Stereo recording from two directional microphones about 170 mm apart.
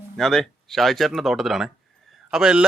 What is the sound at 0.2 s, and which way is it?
A man's voice, centre (ahead or behind).